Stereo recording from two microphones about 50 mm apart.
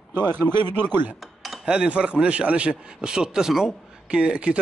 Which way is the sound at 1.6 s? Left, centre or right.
Right.